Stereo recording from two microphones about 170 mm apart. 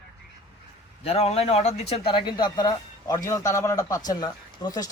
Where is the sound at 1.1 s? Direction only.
40° left (ahead or behind).